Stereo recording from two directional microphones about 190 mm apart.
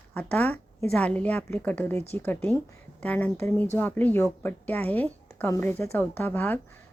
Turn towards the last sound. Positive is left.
turn(degrees=10)  # may be behind; listen again after turning